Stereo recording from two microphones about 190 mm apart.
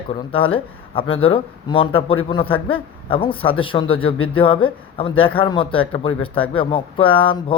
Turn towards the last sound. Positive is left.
turn(degrees=25)  # may be behind; listen again after turning